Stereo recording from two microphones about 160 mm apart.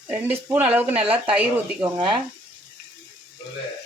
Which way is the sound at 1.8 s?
25° right (ahead or behind).